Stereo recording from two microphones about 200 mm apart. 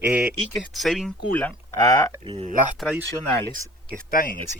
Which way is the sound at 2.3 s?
25° right (ahead or behind).